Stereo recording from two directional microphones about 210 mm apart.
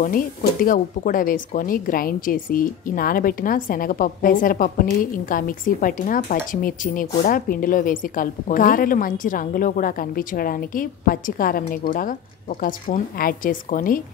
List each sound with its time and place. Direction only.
0.0 s speech: 40° left (ahead or behind)